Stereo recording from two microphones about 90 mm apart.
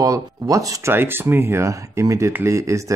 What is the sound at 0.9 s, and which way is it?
Speech, 25° right (ahead or behind).